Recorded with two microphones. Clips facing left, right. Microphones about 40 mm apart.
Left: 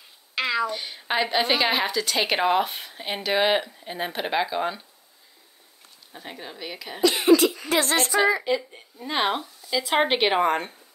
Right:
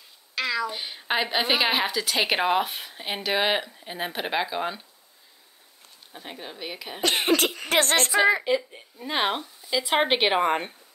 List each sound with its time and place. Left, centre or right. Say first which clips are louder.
0.3 s a sound: left 2 dB; left
0.7 s a woman's voice: even; centre
6.1 s speech: left 1 dB; centre
7.0 s speech: left 5 dB; right
8.5 s a woman's voice: even; centre